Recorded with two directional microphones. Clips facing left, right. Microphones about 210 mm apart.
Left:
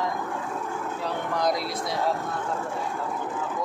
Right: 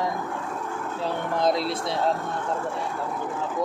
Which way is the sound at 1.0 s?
25° right (ahead or behind).